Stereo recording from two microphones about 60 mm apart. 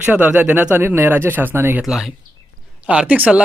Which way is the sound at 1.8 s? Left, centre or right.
Centre.